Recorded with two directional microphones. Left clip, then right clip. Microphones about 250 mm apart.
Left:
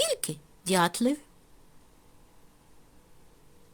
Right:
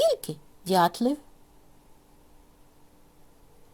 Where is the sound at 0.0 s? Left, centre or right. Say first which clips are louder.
Right 5 dB; left.